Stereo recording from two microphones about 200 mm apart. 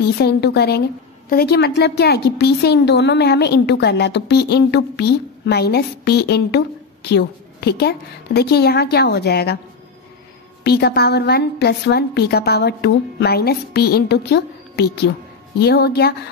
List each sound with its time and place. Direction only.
0.0 s a woman's voice: 55° left (ahead or behind)
10.6 s a woman's voice: 55° left (ahead or behind)